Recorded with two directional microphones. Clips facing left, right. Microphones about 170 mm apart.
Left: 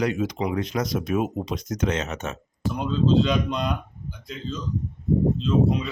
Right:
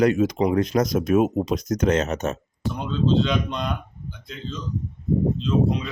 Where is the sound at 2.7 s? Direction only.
5° left (ahead or behind).